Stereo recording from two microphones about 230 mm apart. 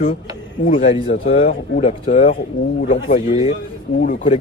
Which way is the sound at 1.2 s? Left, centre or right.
Left.